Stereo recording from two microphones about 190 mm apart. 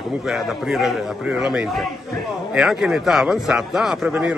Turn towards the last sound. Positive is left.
turn(degrees=-5)  # may be behind; listen again after turning